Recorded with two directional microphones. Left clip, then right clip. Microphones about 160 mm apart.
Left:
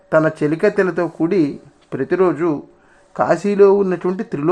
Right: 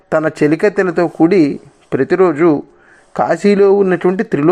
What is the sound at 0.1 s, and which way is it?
Speech, 20° right (ahead or behind).